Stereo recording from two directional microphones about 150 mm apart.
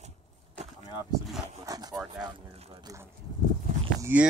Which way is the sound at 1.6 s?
25° right (ahead or behind).